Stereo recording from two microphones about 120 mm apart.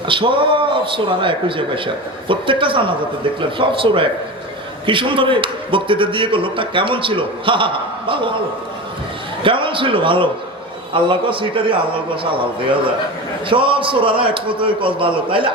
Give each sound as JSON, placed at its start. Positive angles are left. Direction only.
{"t": 0.1, "sound": "a man's voice", "side_deg": -45}
{"t": 9.4, "sound": "a man's voice", "side_deg": -45}